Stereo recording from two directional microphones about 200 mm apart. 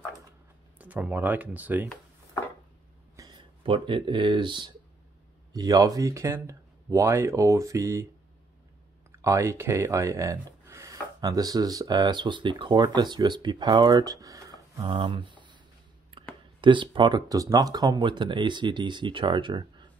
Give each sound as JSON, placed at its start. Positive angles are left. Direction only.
{"t": 0.7, "sound": "speech", "side_deg": -5}
{"t": 3.2, "sound": "speech", "side_deg": -25}
{"t": 9.2, "sound": "speech", "side_deg": -15}